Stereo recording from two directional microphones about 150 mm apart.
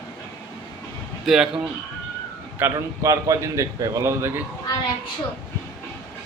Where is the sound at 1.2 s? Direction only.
5° right (ahead or behind).